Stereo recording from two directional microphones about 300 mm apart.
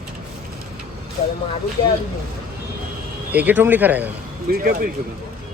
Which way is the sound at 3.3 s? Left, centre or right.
Centre.